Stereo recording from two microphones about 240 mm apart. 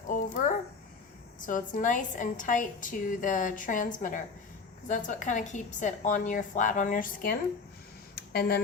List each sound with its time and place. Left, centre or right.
0.1 s a sound: left
1.5 s a woman's voice: left
8.4 s a woman's voice: left